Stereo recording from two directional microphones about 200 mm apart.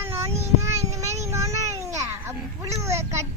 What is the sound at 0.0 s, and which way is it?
Child singing, 15° right (ahead or behind).